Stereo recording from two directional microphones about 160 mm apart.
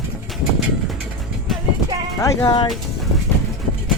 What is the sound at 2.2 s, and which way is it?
Speech, 25° left (ahead or behind).